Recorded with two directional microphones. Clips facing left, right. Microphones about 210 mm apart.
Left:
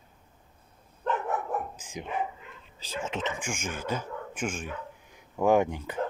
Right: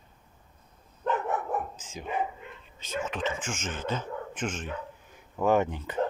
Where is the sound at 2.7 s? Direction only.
30° left (ahead or behind); by 6.0 s 10° left (ahead or behind).